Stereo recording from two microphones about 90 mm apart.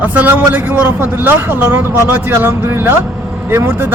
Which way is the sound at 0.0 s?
20° right (ahead or behind).